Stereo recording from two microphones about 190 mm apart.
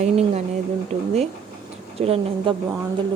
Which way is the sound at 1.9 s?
30° right (ahead or behind).